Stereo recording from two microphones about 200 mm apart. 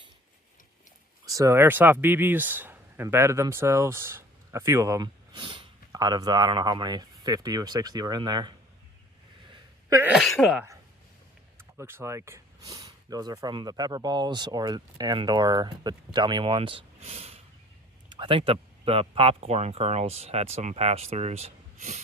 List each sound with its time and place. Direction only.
1.2 s speech: 15° right (ahead or behind)
9.5 s a sound: 15° right (ahead or behind)
10.1 s speech: centre (ahead or behind); by 22.0 s 35° right (ahead or behind)